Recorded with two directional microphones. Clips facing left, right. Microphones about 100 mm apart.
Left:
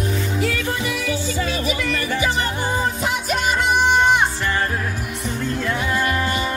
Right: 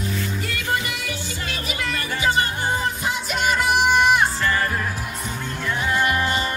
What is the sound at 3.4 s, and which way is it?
Music, centre (ahead or behind).